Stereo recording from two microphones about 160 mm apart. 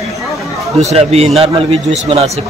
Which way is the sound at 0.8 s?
40° right (ahead or behind).